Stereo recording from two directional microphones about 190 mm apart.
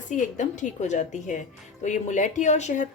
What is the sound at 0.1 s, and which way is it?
A woman's voice, 40° left (ahead or behind).